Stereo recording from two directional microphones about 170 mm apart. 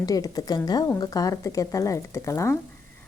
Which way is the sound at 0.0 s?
20° left (ahead or behind).